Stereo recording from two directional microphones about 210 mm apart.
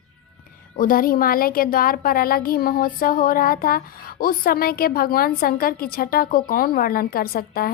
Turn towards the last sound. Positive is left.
turn(degrees=45)  # may be behind; listen again after turning